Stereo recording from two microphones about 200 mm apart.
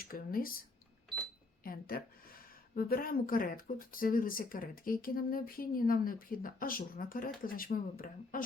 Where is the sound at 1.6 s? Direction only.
45° left (ahead or behind).